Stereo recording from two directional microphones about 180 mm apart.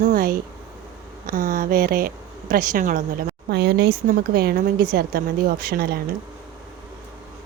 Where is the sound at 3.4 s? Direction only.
65° right (ahead or behind).